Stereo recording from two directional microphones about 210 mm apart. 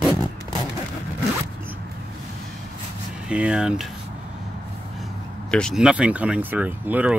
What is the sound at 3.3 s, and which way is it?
Speech, 5° right (ahead or behind).